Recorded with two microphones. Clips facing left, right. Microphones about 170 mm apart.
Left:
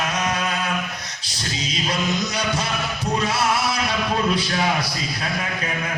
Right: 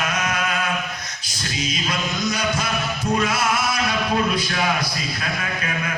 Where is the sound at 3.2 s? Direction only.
35° left (ahead or behind).